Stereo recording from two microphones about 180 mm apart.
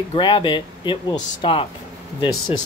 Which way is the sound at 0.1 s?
25° left (ahead or behind).